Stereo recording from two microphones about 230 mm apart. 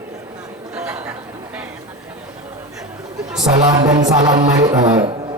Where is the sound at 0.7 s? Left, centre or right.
Centre.